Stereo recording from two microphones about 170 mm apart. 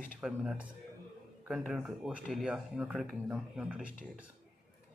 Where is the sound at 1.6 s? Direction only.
Centre (ahead or behind).